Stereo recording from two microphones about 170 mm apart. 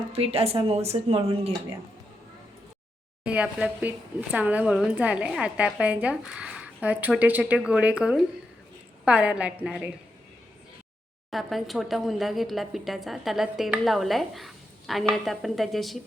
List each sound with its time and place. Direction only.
0.1 s speech: 35° right (ahead or behind)
3.2 s a woman's voice: 5° right (ahead or behind)
11.3 s a woman's voice: centre (ahead or behind)